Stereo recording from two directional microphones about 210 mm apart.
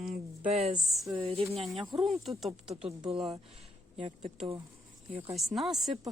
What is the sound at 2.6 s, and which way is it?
Speech, 25° right (ahead or behind).